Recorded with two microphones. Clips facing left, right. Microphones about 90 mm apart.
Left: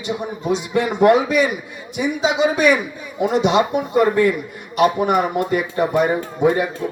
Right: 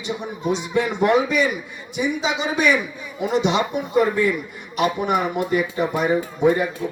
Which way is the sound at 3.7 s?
50° left (ahead or behind).